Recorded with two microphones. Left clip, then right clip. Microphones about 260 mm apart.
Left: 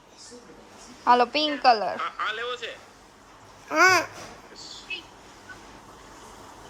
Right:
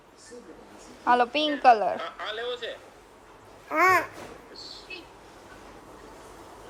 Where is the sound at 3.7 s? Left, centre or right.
Left.